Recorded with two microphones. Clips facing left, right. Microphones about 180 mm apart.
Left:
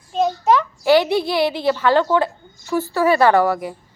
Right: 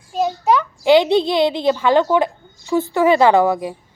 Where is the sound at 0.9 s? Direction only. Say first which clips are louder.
Right 3 dB; 20° right (ahead or behind).